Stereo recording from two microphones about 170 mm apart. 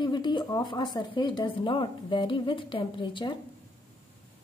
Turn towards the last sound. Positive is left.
turn(degrees=30)  # may be behind; listen again after turning